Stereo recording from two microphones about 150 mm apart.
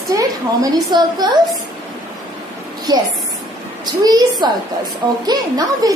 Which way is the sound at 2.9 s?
25° right (ahead or behind).